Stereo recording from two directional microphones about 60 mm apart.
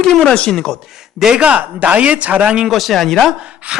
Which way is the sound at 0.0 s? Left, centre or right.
Centre.